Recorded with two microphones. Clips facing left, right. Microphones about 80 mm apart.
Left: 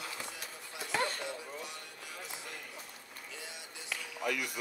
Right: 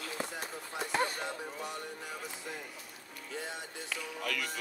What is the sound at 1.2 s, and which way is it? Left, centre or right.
Speech, right.